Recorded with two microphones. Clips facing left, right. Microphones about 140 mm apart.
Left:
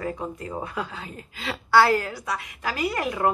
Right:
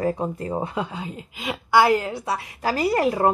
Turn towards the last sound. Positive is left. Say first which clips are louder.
# right 5 dB
turn(degrees=-35)  # may be behind; listen again after turning